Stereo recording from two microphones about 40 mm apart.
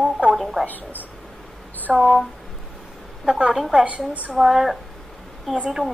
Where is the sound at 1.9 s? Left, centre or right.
Centre.